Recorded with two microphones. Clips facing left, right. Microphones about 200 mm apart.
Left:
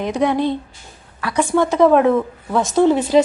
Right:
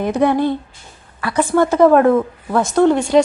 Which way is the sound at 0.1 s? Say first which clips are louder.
Right 3 dB; 5° right (ahead or behind).